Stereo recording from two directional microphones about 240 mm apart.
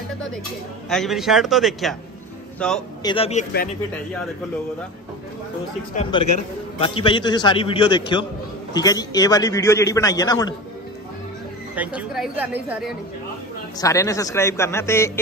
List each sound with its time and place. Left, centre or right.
0.8 s speech: centre
3.0 s a man's voice: left
6.1 s a man's voice: centre
11.7 s speech: centre
13.7 s a man's voice: centre